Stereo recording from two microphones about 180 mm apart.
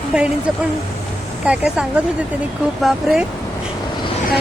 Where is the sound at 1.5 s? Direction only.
5° right (ahead or behind).